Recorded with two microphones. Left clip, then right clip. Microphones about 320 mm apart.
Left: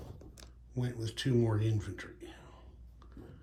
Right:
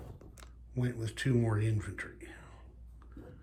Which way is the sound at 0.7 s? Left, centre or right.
Centre.